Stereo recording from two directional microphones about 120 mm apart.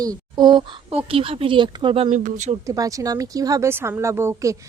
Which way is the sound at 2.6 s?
30° right (ahead or behind).